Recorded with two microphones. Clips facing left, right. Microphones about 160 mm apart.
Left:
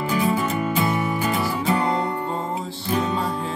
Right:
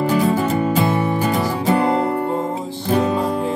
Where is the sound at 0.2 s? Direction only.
40° right (ahead or behind); by 2.3 s 60° right (ahead or behind).